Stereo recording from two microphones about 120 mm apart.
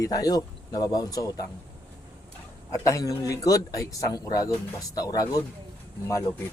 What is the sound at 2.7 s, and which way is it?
Speech, 25° left (ahead or behind).